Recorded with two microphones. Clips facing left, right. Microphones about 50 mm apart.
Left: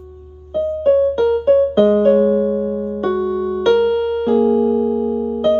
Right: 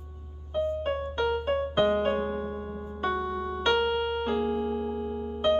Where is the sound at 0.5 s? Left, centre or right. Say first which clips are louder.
Left 14 dB; centre.